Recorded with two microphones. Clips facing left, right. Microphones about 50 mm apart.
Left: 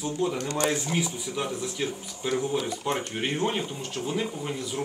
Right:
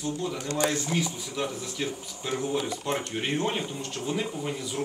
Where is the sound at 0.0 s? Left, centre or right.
Left.